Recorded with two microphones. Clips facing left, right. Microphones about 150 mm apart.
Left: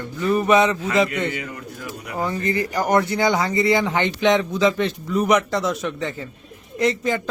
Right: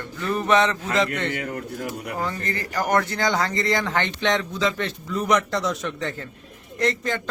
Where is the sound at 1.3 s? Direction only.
50° right (ahead or behind).